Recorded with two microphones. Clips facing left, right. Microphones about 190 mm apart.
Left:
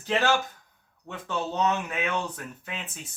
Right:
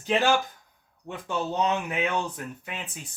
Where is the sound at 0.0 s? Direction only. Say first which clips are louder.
Right 2 dB; 15° right (ahead or behind).